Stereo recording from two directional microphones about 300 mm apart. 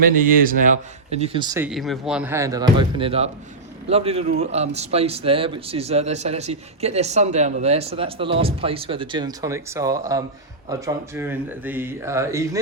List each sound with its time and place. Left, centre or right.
0.2 s a man's voice: right; by 12.5 s centre